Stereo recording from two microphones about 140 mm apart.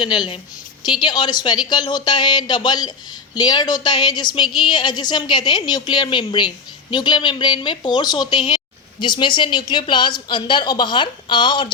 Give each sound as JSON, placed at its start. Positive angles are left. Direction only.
{"t": 0.0, "sound": "a woman's voice", "side_deg": 35}